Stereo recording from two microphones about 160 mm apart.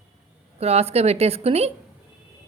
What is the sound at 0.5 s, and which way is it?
A woman's voice, 40° right (ahead or behind).